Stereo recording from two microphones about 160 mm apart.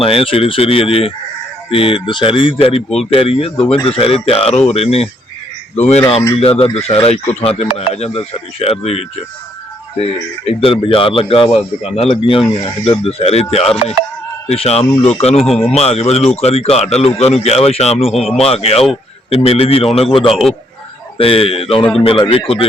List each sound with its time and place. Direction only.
0.0 s speech: 35° left (ahead or behind)
15.4 s speech: centre (ahead or behind)
15.7 s speech: 40° left (ahead or behind)
18.1 s speech: centre (ahead or behind)
18.3 s speech: 40° left (ahead or behind)
20.3 s speech: centre (ahead or behind)
21.2 s speech: 35° left (ahead or behind)